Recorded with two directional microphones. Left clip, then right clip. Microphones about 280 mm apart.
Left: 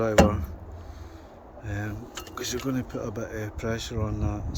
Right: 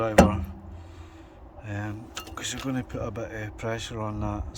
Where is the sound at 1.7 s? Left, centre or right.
Centre.